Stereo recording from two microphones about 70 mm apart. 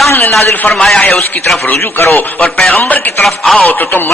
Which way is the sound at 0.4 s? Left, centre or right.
Left.